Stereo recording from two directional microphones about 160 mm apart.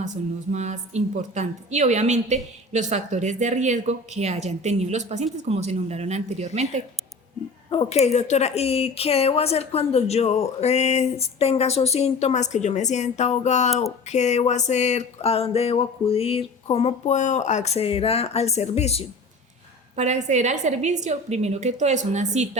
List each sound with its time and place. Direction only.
0.0 s a woman's voice: 45° right (ahead or behind)
7.7 s speech: 40° left (ahead or behind)
14.1 s a sound: 45° left (ahead or behind)
20.0 s a woman's voice: 45° right (ahead or behind)